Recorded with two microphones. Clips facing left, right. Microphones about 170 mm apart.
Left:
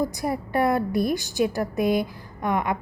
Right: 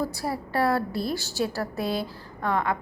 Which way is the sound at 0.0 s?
15° left (ahead or behind).